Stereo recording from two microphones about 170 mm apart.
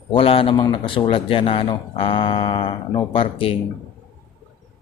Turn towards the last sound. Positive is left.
turn(degrees=35)  # may be behind; listen again after turning